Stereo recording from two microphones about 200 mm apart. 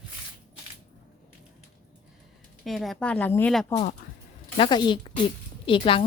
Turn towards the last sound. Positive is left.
turn(degrees=25)  # may be behind; listen again after turning